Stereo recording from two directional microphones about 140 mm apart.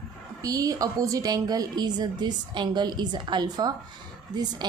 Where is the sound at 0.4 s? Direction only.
25° right (ahead or behind).